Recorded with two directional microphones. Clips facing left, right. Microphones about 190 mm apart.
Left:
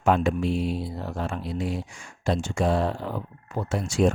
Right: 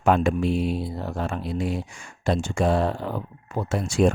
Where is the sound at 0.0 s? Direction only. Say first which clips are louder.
Right 2 dB; 55° right (ahead or behind).